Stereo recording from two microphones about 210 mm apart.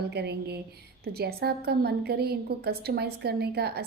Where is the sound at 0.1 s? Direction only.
50° right (ahead or behind).